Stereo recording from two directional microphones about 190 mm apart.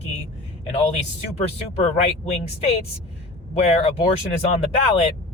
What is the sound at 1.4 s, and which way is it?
Speech, 35° left (ahead or behind).